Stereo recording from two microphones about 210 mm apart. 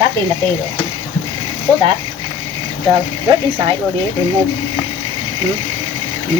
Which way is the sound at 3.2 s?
15° right (ahead or behind).